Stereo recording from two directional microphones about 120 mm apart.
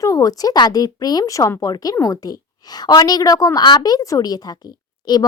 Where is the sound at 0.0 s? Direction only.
30° left (ahead or behind).